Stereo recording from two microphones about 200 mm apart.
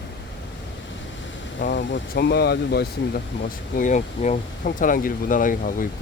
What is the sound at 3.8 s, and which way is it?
Speech, 40° left (ahead or behind).